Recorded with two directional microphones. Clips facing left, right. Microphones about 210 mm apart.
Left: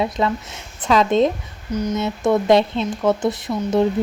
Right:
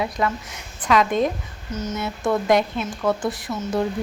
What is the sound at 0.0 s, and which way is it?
A woman's voice, 25° left (ahead or behind).